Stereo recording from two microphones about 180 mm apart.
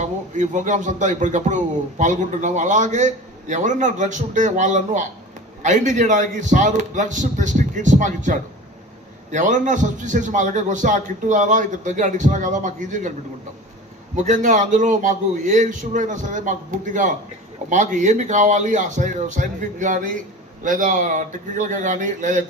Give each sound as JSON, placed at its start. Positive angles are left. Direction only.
{"t": 0.0, "sound": "a man's voice", "side_deg": -45}
{"t": 14.3, "sound": "a man's voice", "side_deg": -45}